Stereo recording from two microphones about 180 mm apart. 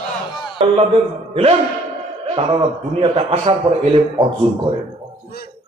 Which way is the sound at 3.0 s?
30° right (ahead or behind).